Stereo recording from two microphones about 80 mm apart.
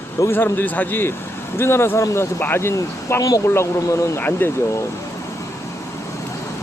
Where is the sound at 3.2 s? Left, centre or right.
Left.